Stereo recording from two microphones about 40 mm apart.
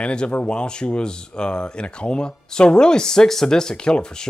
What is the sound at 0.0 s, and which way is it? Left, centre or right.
Speech, left.